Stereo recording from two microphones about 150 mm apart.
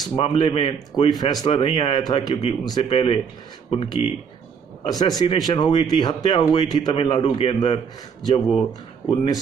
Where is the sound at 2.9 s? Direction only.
45° left (ahead or behind).